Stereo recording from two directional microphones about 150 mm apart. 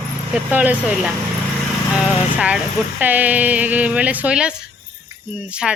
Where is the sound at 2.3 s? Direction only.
10° right (ahead or behind).